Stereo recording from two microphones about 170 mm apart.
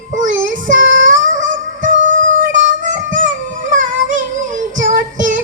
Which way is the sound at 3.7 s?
50° right (ahead or behind).